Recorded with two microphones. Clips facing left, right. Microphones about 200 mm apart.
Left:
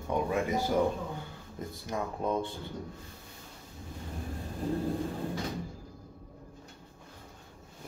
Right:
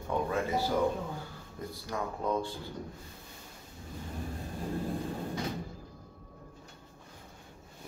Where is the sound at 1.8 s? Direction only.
20° left (ahead or behind).